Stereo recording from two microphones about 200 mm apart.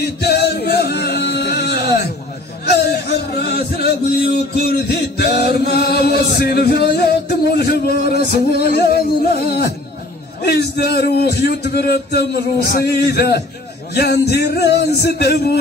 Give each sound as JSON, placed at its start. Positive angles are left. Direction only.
{"t": 0.0, "sound": "music", "side_deg": 55}
{"t": 10.4, "sound": "a man's voice", "side_deg": 55}